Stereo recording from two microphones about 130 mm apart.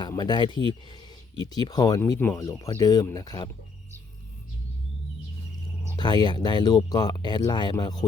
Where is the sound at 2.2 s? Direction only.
15° left (ahead or behind).